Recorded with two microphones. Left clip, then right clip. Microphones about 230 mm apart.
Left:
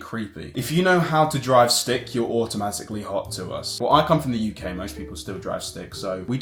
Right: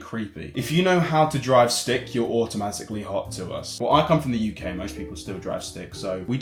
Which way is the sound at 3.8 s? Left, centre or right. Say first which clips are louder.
Left 1 dB; left.